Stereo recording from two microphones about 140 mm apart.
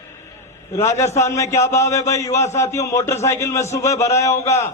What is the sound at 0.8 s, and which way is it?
A man's voice, 20° left (ahead or behind).